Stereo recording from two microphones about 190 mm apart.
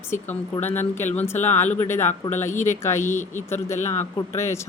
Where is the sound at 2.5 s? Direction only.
40° left (ahead or behind).